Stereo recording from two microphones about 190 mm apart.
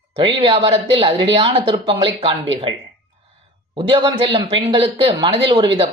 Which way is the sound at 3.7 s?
25° right (ahead or behind).